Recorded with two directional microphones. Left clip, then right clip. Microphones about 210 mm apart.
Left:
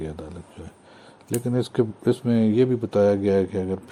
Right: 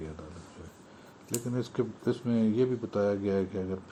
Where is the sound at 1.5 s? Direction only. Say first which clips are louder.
Left 9 dB; 50° left (ahead or behind).